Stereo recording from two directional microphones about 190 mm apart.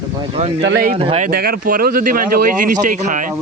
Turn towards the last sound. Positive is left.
turn(degrees=-40)  # may be behind; listen again after turning